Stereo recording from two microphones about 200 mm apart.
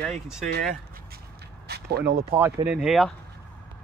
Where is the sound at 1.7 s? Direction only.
55° right (ahead or behind).